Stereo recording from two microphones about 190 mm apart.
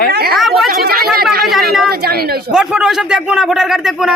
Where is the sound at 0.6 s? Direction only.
50° right (ahead or behind).